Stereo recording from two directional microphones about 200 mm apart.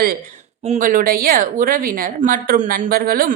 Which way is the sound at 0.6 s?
40° right (ahead or behind).